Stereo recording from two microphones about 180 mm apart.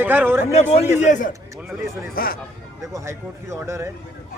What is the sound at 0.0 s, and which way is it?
Speech, 10° right (ahead or behind).